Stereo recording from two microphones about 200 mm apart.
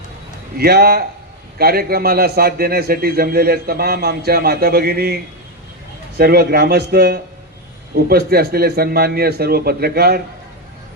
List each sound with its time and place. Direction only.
0.5 s a man's voice: 50° right (ahead or behind)